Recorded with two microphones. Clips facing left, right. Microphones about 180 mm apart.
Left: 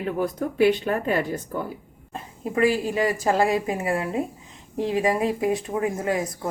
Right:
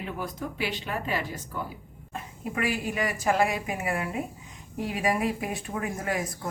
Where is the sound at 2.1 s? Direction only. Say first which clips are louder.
Left 7 dB; 30° left (ahead or behind).